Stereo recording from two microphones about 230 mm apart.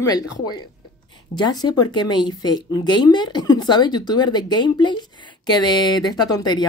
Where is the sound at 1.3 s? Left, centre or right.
Centre.